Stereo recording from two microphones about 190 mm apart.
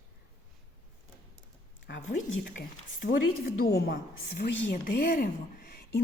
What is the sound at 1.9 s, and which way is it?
Speech, 70° left (ahead or behind).